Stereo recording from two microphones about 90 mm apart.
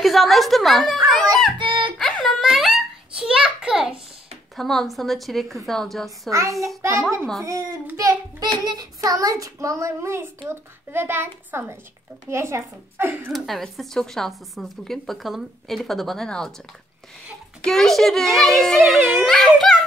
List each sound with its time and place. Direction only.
0.0 s a sound: centre (ahead or behind)
1.6 s music: 70° right (ahead or behind)
2.0 s a sound: 5° left (ahead or behind)
4.6 s a woman's voice: centre (ahead or behind)
6.8 s a child's voice: 30° right (ahead or behind)
8.4 s a child's voice: 50° right (ahead or behind); by 13.3 s 25° right (ahead or behind)
13.3 s a woman's voice: centre (ahead or behind)
17.6 s a woman's voice: 5° left (ahead or behind)